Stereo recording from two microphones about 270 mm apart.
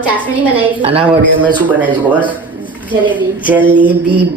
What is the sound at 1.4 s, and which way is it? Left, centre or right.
Speech, centre.